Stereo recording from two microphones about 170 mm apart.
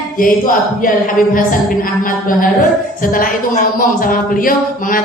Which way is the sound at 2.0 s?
55° left (ahead or behind).